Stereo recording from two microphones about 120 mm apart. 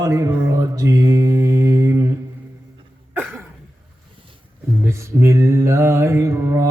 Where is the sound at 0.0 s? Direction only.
25° right (ahead or behind).